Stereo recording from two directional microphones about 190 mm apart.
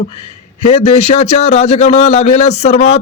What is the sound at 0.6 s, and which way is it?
A man's voice, 35° left (ahead or behind).